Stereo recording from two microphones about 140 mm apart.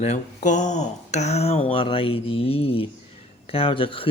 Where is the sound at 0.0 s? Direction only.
55° left (ahead or behind).